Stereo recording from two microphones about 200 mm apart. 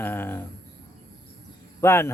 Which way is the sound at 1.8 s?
10° left (ahead or behind).